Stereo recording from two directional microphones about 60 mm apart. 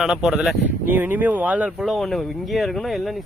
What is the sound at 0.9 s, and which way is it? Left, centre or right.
Speech, right.